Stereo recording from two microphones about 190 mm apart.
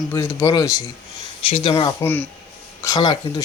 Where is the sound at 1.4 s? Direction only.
30° left (ahead or behind).